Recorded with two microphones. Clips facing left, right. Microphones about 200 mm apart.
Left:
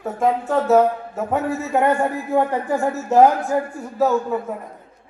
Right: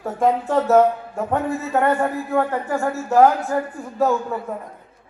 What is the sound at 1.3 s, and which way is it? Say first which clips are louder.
Speech: left 1 dB; 10° left (ahead or behind).